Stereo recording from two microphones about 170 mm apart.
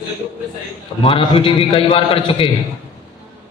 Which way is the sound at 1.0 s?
30° left (ahead or behind).